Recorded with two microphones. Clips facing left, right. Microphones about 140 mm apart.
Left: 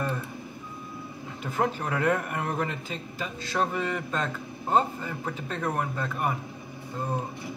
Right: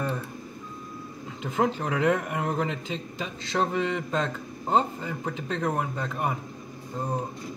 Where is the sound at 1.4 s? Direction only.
20° right (ahead or behind).